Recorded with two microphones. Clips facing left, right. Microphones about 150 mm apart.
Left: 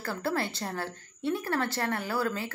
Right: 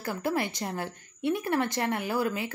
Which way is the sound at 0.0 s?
15° right (ahead or behind).